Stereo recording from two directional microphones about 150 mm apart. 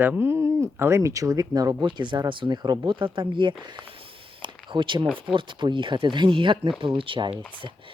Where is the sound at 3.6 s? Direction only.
30° right (ahead or behind).